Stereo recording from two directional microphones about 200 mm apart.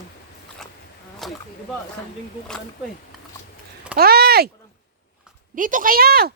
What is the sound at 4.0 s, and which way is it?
Speech, 50° right (ahead or behind).